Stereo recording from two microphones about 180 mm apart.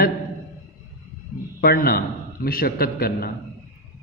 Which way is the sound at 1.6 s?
55° left (ahead or behind).